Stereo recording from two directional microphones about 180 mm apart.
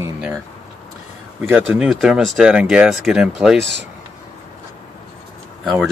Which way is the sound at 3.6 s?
75° right (ahead or behind).